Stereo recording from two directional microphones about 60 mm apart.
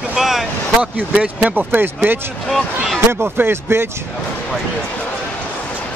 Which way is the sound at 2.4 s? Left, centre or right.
Centre.